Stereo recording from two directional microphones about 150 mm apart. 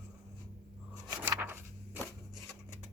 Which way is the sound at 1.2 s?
10° right (ahead or behind).